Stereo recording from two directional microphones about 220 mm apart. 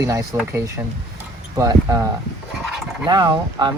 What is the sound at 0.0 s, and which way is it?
Speech, 15° right (ahead or behind).